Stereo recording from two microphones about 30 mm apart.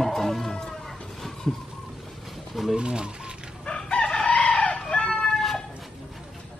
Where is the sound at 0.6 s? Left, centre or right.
Centre.